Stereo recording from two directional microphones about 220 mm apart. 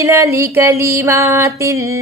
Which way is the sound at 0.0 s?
15° right (ahead or behind).